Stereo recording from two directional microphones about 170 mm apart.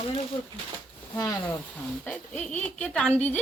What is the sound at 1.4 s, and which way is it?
Speech, 10° left (ahead or behind).